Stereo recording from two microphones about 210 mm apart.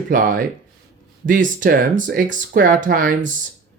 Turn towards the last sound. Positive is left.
turn(degrees=-40)  # may be behind; listen again after turning